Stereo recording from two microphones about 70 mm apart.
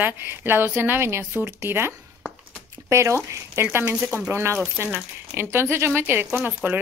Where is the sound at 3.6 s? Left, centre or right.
Right.